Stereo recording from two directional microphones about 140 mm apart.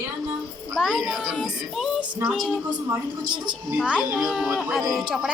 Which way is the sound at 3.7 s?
5° right (ahead or behind).